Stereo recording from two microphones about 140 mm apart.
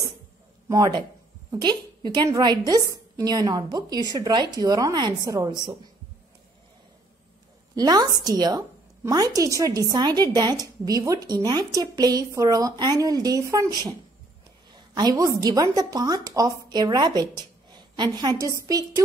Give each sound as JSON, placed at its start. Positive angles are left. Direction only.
{"t": 0.7, "sound": "a woman's voice", "side_deg": -30}
{"t": 7.7, "sound": "a woman's voice", "side_deg": -30}
{"t": 17.2, "sound": "a sound", "side_deg": -30}
{"t": 18.7, "sound": "a woman's voice", "side_deg": -25}